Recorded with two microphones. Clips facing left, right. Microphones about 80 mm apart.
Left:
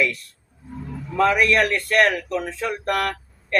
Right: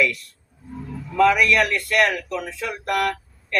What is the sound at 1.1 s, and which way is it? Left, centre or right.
A man's voice, left.